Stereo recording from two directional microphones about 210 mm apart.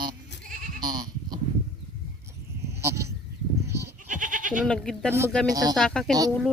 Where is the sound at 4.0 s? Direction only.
40° right (ahead or behind).